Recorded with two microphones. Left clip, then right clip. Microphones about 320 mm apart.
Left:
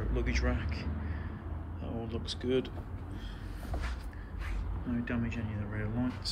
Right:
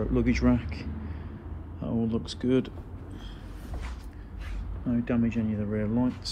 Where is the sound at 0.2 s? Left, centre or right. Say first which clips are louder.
Right 8 dB; centre.